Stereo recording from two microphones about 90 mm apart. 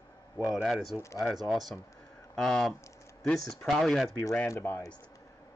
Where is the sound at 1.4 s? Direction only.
Centre (ahead or behind).